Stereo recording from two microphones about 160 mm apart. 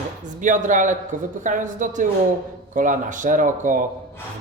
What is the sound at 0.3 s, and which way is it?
A man's voice, 50° right (ahead or behind).